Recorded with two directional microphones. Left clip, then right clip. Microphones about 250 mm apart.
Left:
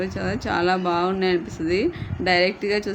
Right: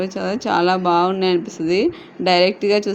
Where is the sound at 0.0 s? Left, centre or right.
Centre.